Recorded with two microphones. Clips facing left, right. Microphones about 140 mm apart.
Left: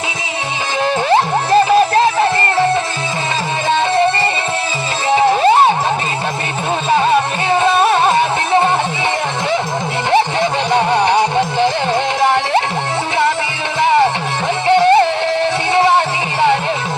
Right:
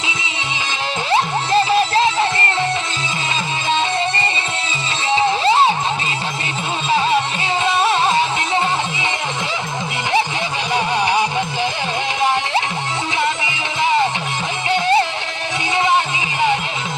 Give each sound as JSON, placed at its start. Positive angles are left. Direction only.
{"t": 1.1, "sound": "music", "side_deg": 55}
{"t": 3.7, "sound": "music", "side_deg": 60}
{"t": 6.9, "sound": "music", "side_deg": 55}
{"t": 10.7, "sound": "music", "side_deg": 60}
{"t": 13.8, "sound": "music", "side_deg": 60}